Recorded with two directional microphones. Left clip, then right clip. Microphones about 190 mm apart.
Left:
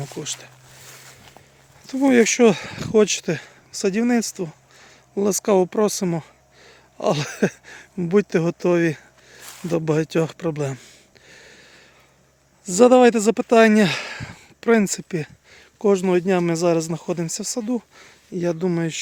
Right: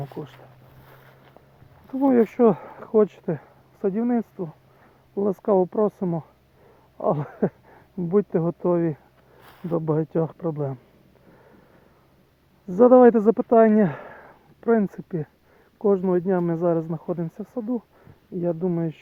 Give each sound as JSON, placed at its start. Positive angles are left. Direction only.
{"t": 2.0, "sound": "speech", "side_deg": 35}
{"t": 9.4, "sound": "a sound", "side_deg": -45}
{"t": 9.7, "sound": "speech", "side_deg": 40}
{"t": 12.6, "sound": "speech", "side_deg": 30}